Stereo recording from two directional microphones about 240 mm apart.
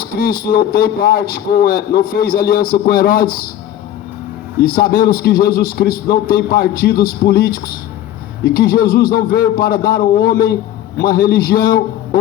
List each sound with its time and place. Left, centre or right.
0.0 s a man's voice: left
4.7 s a man's voice: left